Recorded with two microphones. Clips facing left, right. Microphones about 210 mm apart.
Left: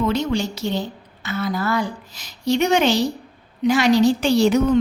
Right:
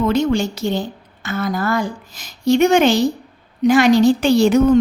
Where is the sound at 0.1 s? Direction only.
50° right (ahead or behind).